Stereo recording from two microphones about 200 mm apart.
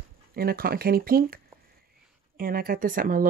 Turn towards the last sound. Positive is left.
turn(degrees=-45)  # may be behind; listen again after turning